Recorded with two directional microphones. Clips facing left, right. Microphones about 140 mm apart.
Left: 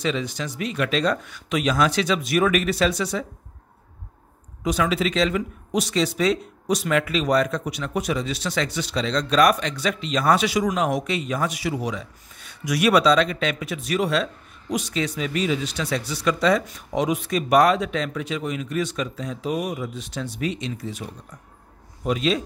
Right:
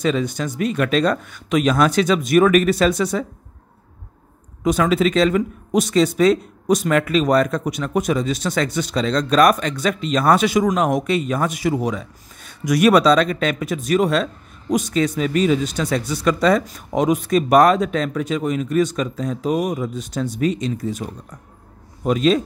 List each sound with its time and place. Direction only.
0.0 s speech: 50° right (ahead or behind)
4.6 s speech: 50° right (ahead or behind)